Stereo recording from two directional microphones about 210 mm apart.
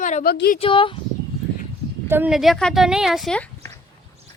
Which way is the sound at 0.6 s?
25° left (ahead or behind).